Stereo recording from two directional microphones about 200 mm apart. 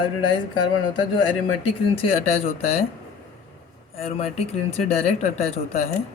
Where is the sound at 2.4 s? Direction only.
30° left (ahead or behind).